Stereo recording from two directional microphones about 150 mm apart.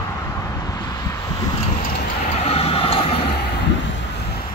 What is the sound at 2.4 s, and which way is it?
Vehicle, 40° left (ahead or behind).